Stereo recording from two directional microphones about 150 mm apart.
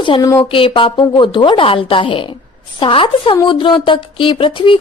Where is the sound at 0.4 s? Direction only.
35° left (ahead or behind).